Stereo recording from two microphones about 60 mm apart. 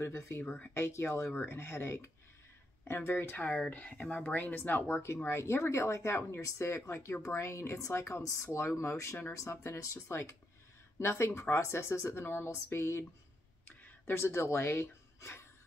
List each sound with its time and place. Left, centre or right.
0.0 s speech: left
3.7 s speech: left
4.8 s speech: left
12.7 s speech: left
14.1 s speech: left